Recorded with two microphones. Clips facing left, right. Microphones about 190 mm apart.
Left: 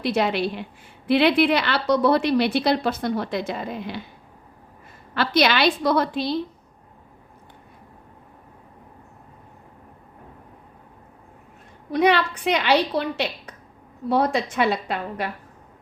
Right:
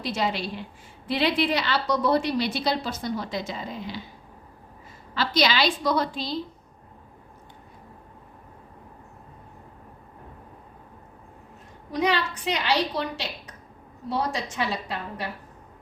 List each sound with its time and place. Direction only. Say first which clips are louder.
0.0 s a woman's voice: left 6 dB; 60° left (ahead or behind)
5.1 s a woman's voice: left 3 dB; 60° left (ahead or behind)
11.9 s a woman's voice: left 6 dB; 60° left (ahead or behind)